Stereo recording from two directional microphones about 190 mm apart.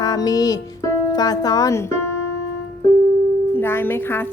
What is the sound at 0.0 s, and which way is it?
Speech, 20° left (ahead or behind).